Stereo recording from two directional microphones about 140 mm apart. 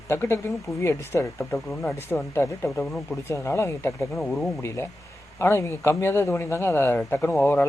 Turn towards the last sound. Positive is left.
turn(degrees=15)  # may be behind; listen again after turning